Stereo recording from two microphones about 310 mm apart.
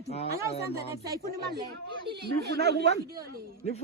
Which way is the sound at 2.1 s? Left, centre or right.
Right.